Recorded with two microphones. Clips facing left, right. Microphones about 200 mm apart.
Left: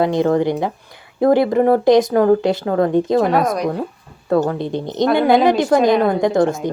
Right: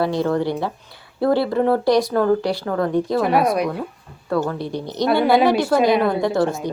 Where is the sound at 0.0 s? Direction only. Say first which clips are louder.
Left 4 dB; 20° left (ahead or behind).